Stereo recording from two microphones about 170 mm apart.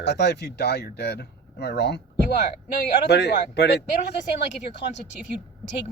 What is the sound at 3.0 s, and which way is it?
Speech, 80° left.